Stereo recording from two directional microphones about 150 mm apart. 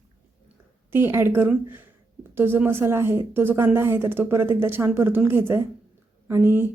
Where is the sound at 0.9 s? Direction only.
15° right (ahead or behind).